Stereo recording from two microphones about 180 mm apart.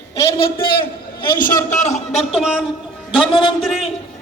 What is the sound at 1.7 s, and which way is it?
Speech, 40° left (ahead or behind).